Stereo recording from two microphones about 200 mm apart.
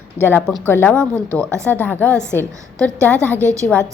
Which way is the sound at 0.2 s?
10° left (ahead or behind).